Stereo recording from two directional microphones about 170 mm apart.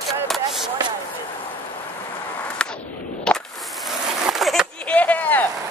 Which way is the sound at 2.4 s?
5° left (ahead or behind).